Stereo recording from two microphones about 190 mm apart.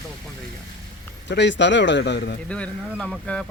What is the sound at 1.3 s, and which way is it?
Speech, 70° left (ahead or behind).